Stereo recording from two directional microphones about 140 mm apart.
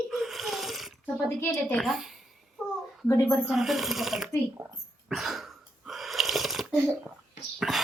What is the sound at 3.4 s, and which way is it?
Speech, centre (ahead or behind).